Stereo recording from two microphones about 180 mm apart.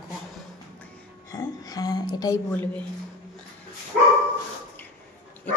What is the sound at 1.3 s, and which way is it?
Speech, 20° left (ahead or behind).